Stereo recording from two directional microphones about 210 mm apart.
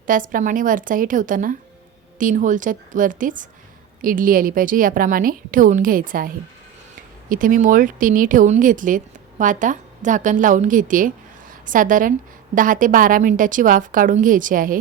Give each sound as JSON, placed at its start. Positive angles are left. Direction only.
{"t": 0.1, "sound": "a woman's voice", "side_deg": -40}